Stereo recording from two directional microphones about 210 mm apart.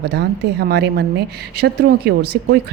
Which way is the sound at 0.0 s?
55° right (ahead or behind).